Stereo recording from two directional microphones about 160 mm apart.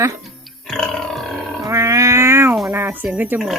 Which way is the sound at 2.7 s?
15° right (ahead or behind).